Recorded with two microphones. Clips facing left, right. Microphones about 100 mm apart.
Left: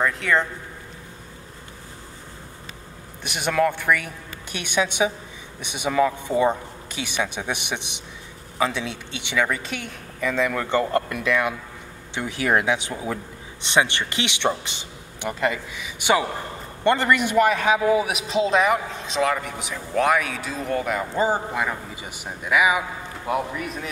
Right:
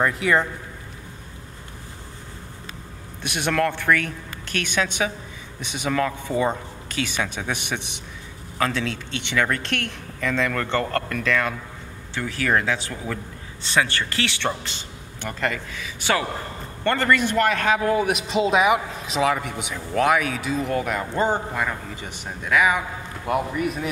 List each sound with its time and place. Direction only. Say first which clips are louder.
0.0 s a man's voice: right 1 dB; 5° right (ahead or behind)
3.2 s a man's voice: left 1 dB; 10° left (ahead or behind)